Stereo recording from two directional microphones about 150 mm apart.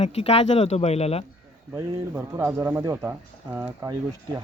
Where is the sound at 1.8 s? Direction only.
15° right (ahead or behind).